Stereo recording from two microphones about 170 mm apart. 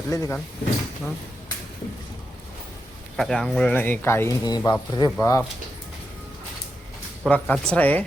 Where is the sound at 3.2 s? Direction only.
Centre (ahead or behind); by 5.2 s 25° left (ahead or behind).